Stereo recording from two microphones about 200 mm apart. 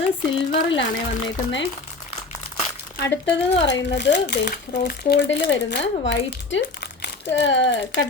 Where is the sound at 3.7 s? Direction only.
60° left (ahead or behind).